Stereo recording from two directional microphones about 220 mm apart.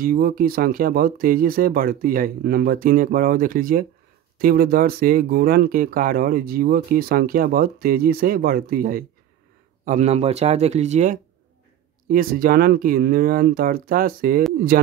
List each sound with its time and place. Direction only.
0.0 s speech: 40° right (ahead or behind)